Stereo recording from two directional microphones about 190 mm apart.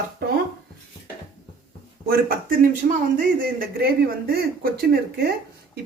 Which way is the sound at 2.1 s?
50° right (ahead or behind).